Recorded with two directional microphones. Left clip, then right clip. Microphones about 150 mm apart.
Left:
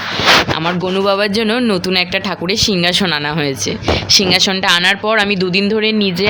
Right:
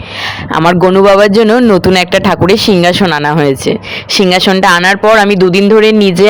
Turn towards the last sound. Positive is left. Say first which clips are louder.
# right 9 dB
turn(degrees=-35)  # may be behind; listen again after turning